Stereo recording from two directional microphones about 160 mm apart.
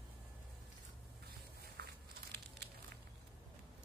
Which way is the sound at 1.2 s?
80° right.